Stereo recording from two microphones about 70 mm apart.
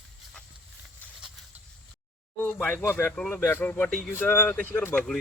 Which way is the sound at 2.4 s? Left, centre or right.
Left.